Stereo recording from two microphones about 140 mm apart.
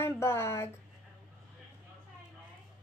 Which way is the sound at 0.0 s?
15° left (ahead or behind).